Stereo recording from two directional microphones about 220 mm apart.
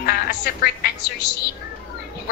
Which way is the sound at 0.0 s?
45° left (ahead or behind).